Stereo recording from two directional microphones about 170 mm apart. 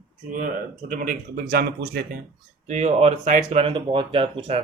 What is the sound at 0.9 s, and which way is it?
Speech, 60° right (ahead or behind).